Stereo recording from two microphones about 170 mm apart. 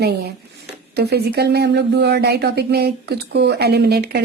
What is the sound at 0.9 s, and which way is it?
A woman's voice, 70° right (ahead or behind).